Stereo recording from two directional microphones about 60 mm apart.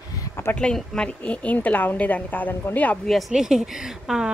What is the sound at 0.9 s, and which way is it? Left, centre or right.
A woman's voice, centre.